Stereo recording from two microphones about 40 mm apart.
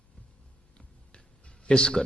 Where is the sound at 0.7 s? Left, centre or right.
Left.